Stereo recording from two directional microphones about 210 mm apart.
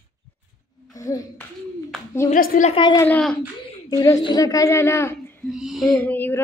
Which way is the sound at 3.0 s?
5° left (ahead or behind).